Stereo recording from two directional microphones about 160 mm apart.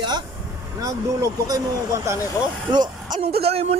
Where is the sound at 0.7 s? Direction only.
20° right (ahead or behind).